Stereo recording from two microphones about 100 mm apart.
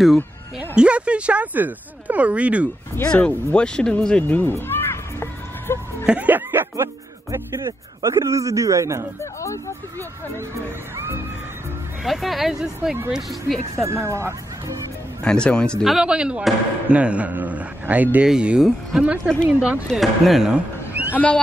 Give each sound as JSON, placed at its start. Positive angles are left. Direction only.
{"t": 0.6, "sound": "speech", "side_deg": -10}
{"t": 3.0, "sound": "cat", "side_deg": 15}
{"t": 6.0, "sound": "speech", "side_deg": -15}
{"t": 9.2, "sound": "speech", "side_deg": 30}
{"t": 12.0, "sound": "speech", "side_deg": 0}
{"t": 13.8, "sound": "speech", "side_deg": -30}
{"t": 15.2, "sound": "speech", "side_deg": 10}
{"t": 15.8, "sound": "speech", "side_deg": -5}
{"t": 21.1, "sound": "speech", "side_deg": 15}